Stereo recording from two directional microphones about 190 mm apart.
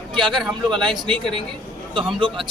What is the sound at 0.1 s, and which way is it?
Speech, centre (ahead or behind).